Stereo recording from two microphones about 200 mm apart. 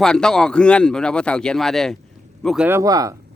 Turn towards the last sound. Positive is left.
turn(degrees=-15)  # may be behind; listen again after turning